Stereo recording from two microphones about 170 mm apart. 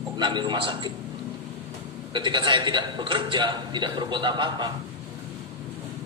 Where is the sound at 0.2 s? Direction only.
25° right (ahead or behind).